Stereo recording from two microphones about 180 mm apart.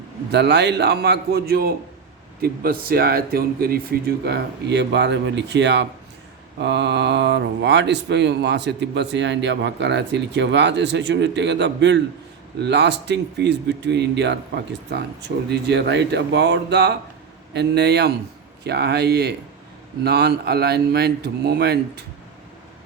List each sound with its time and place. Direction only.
0.3 s a man's voice: 70° right (ahead or behind)